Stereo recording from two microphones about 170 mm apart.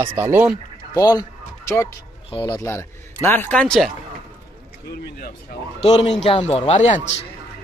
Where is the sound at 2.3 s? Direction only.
30° left (ahead or behind).